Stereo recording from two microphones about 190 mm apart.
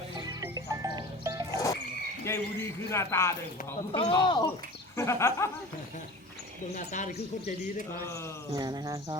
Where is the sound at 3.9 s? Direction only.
25° left (ahead or behind).